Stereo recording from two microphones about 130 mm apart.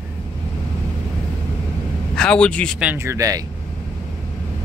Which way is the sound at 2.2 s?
10° left (ahead or behind).